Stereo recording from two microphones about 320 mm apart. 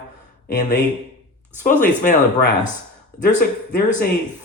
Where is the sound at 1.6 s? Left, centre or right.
Left.